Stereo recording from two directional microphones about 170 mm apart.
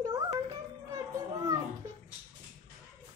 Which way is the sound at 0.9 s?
20° right (ahead or behind).